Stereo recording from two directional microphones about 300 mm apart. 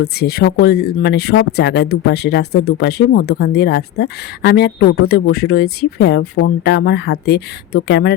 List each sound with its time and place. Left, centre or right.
0.0 s speech: left